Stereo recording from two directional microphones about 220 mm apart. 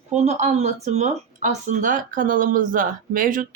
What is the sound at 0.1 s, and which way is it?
Speech, 30° right (ahead or behind).